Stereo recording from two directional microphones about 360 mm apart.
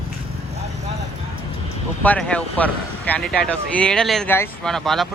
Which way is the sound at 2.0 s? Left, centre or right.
Centre.